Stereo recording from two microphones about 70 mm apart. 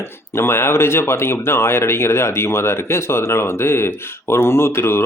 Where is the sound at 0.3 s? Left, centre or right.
Left.